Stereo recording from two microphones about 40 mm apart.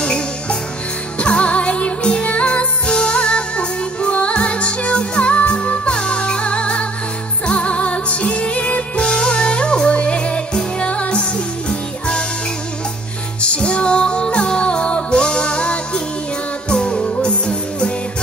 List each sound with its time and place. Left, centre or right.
0.0 s music: left
13.4 s music: left